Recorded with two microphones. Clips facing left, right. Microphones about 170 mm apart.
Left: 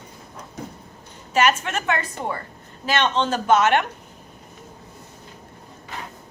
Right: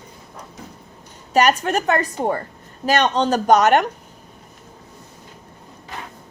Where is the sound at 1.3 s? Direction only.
40° right (ahead or behind).